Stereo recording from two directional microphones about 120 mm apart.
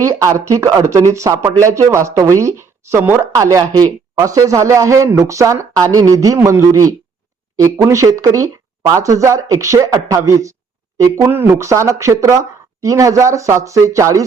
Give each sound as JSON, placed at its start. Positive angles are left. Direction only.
{"t": 0.0, "sound": "speech", "side_deg": -25}
{"t": 3.3, "sound": "speech", "side_deg": -30}